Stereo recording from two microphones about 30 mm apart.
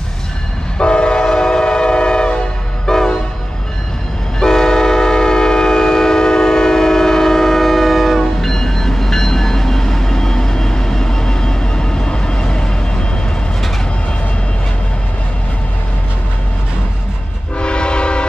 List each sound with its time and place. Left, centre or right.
0.7 s train: left
4.4 s train: left; by 8.2 s centre
8.2 s train: centre; by 12.7 s left
17.6 s train: left